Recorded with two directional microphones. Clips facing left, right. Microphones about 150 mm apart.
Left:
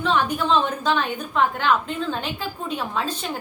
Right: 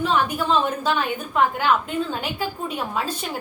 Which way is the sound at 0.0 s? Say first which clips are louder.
Even; 5° right (ahead or behind).